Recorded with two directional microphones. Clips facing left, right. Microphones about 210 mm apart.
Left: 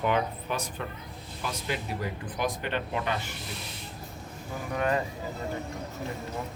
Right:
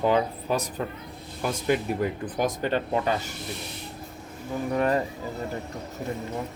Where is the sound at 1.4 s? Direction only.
50° right (ahead or behind).